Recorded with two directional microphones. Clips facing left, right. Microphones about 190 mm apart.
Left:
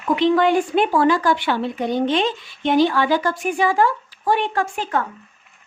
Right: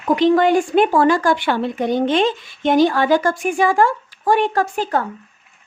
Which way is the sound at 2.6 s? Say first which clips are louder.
Right 2 dB; 45° right (ahead or behind).